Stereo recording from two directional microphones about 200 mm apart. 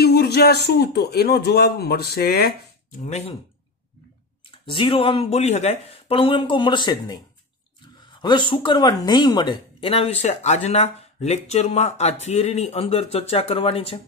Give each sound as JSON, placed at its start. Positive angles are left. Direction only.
{"t": 0.0, "sound": "a sound", "side_deg": 50}
{"t": 0.7, "sound": "speech", "side_deg": 55}
{"t": 3.0, "sound": "speech", "side_deg": 35}
{"t": 4.5, "sound": "speech", "side_deg": 25}
{"t": 8.2, "sound": "speech", "side_deg": 25}